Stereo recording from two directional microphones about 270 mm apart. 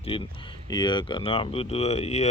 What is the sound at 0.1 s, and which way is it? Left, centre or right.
Speech, centre.